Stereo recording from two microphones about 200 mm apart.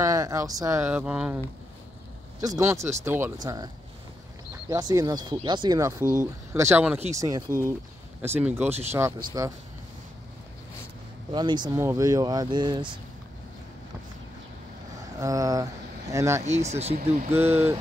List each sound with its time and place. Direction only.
0.0 s speech: 15° right (ahead or behind)
2.4 s speech: 15° right (ahead or behind)
11.3 s speech: 20° right (ahead or behind)
15.1 s speech: 15° right (ahead or behind)
16.4 s speech: 35° right (ahead or behind)
17.4 s speech: 10° right (ahead or behind)